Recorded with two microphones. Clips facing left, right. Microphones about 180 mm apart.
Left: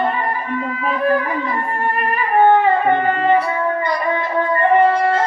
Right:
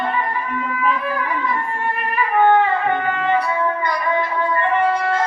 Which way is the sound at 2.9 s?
40° left (ahead or behind).